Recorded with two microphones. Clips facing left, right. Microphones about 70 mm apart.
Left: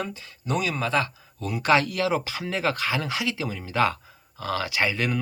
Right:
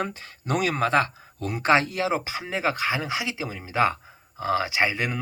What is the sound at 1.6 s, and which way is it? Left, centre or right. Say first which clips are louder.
Speech: even; right.